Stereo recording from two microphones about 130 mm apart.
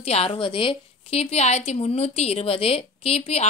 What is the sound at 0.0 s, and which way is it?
A woman's voice, 50° left (ahead or behind).